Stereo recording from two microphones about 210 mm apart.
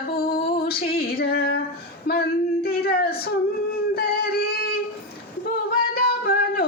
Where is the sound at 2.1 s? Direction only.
45° left (ahead or behind).